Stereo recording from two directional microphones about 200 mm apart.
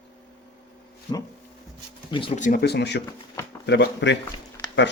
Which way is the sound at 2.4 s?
45° left (ahead or behind).